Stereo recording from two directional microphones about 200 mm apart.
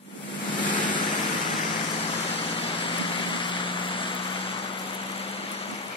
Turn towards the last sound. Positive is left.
turn(degrees=25)  # may be behind; listen again after turning